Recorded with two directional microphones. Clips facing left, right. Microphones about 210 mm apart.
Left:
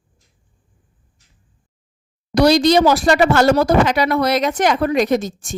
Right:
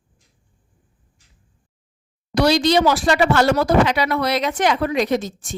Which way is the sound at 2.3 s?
40° left (ahead or behind).